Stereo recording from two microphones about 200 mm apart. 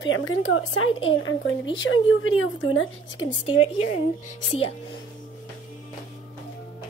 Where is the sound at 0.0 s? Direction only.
85° left.